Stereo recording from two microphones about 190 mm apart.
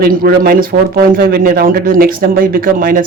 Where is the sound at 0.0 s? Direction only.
50° right (ahead or behind).